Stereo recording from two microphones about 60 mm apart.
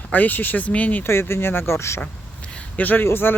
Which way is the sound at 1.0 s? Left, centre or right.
Left.